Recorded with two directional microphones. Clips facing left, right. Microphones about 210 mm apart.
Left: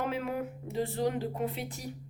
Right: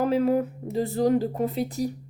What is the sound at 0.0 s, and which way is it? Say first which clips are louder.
A woman's voice: right 11 dB; 35° right (ahead or behind).